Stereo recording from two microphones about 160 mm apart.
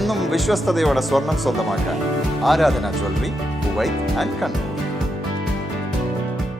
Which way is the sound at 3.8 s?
Centre (ahead or behind).